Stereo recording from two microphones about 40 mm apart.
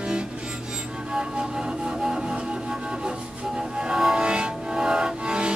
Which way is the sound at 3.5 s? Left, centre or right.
Centre.